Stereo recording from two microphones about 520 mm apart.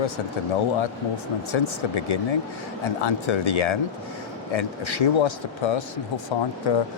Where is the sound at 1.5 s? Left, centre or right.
Left.